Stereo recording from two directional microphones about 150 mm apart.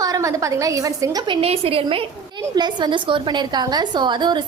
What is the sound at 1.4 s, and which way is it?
A woman's voice, 40° right (ahead or behind).